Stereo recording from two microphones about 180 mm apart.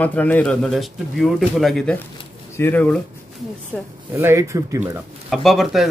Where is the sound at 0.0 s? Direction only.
10° left (ahead or behind).